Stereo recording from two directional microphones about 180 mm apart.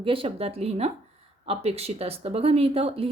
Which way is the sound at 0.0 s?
30° right (ahead or behind).